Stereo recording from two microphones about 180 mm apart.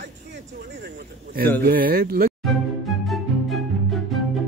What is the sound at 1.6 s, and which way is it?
Speech, 55° right (ahead or behind).